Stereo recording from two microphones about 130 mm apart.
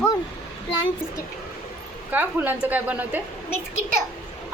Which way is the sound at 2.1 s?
15° right (ahead or behind).